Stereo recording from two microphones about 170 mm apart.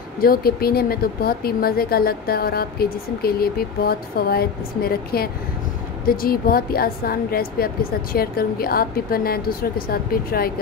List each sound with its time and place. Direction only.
0.2 s a woman's voice: 60° left (ahead or behind)